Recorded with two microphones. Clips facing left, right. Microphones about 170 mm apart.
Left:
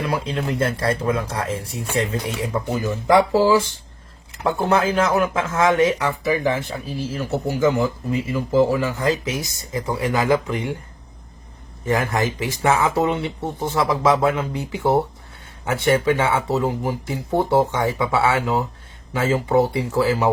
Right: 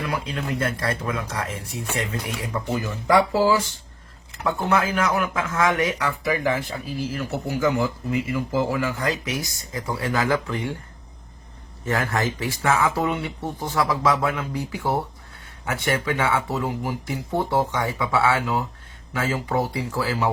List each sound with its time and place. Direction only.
0.0 s speech: 30° left (ahead or behind)
11.9 s speech: 15° left (ahead or behind)